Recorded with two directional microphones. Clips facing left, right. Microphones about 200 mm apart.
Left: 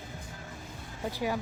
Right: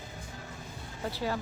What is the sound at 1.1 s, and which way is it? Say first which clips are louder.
Speech: left 1 dB; 15° left (ahead or behind).